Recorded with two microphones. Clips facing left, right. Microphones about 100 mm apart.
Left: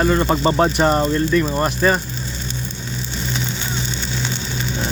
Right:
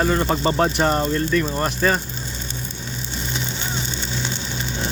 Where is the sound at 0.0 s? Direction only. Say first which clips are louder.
Left 3 dB; 15° left (ahead or behind).